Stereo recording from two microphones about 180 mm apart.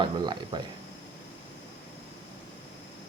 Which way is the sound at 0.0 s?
25° right (ahead or behind).